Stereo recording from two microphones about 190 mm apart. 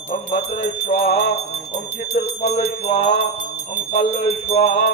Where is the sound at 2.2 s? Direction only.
35° left (ahead or behind).